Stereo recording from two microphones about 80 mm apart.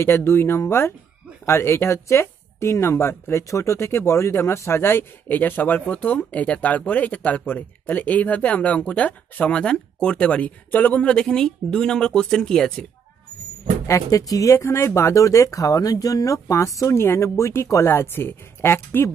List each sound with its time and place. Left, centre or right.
0.0 s speech: left; by 12.8 s centre
13.8 s speech: left
17.8 s a woman's voice: left